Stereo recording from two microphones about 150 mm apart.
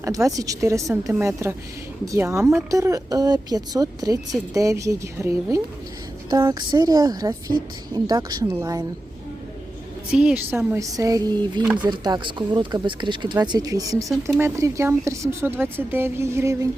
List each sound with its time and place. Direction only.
0.0 s speech: 20° right (ahead or behind)
10.1 s speech: 5° right (ahead or behind); by 11.6 s 25° right (ahead or behind)
11.6 s speech: 10° right (ahead or behind)
11.9 s speech: 30° right (ahead or behind)